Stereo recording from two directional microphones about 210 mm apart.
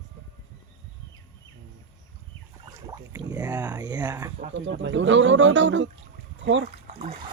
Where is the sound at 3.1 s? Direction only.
15° right (ahead or behind).